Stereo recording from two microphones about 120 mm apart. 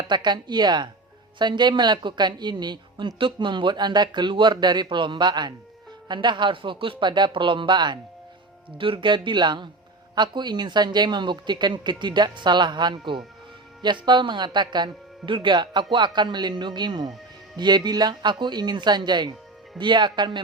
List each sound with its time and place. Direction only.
0.1 s speech: 40° right (ahead or behind)